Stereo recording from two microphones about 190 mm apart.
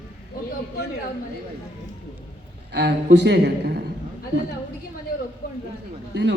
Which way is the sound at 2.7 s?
65° right (ahead or behind).